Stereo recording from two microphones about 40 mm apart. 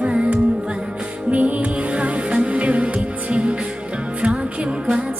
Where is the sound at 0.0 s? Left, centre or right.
Right.